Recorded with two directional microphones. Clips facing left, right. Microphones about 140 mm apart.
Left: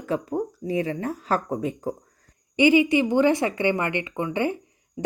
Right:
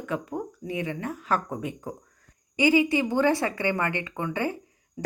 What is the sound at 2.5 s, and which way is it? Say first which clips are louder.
A woman's voice: left 4 dB; 20° left (ahead or behind).